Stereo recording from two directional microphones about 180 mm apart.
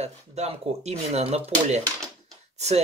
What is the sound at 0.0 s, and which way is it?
Speech, 35° right (ahead or behind).